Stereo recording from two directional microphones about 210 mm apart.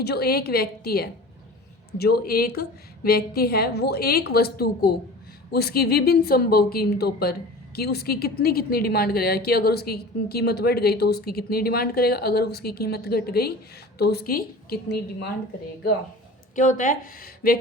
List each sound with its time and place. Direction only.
0.0 s a woman's voice: 50° left (ahead or behind)
16.6 s a woman's voice: 40° left (ahead or behind)